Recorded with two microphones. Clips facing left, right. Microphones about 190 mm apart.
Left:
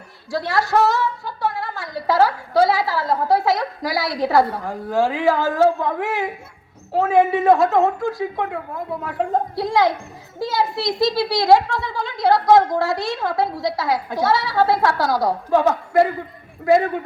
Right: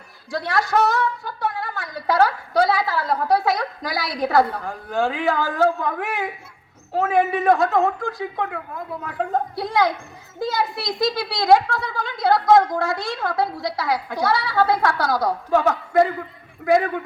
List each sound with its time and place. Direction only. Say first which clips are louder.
0.3 s a woman's voice: left 2 dB; 25° left (ahead or behind)